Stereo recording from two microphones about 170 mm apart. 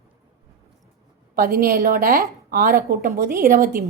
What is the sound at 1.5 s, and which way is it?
A woman's voice, 60° right (ahead or behind).